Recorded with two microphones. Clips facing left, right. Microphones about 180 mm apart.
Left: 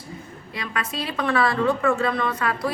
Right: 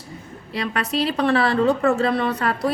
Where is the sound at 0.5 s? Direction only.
35° right (ahead or behind).